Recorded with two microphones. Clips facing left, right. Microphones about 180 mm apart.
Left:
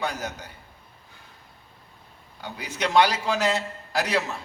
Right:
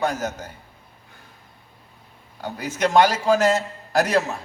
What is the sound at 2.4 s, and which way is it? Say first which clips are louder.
A man's voice: right 6 dB; 45° right (ahead or behind).